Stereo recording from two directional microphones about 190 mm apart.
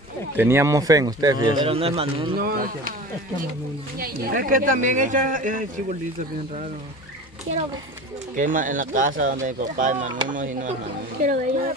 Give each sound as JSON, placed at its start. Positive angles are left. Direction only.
{"t": 0.4, "sound": "speech", "side_deg": -15}
{"t": 1.6, "sound": "speech", "side_deg": -30}
{"t": 2.3, "sound": "speech", "side_deg": -50}
{"t": 4.0, "sound": "speech", "side_deg": -50}
{"t": 8.4, "sound": "speech", "side_deg": -45}